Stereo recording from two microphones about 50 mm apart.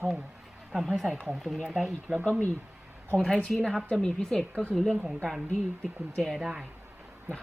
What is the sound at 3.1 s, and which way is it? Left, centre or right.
Speech, centre.